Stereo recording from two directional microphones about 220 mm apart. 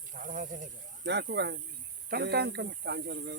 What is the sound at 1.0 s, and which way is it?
Speech, 50° right (ahead or behind).